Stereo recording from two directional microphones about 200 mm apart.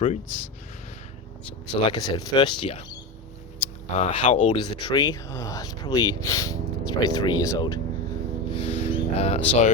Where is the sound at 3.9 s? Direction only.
35° left (ahead or behind).